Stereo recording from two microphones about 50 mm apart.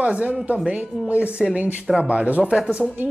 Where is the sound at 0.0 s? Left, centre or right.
Right.